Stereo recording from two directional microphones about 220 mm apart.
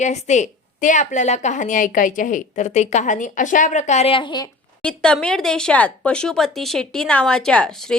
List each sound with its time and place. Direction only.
0.0 s a woman's voice: 30° left (ahead or behind)
4.8 s speech: 5° left (ahead or behind)